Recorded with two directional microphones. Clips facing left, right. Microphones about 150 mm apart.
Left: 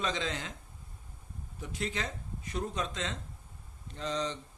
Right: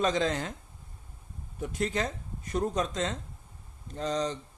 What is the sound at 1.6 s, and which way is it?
Speech, 45° right (ahead or behind).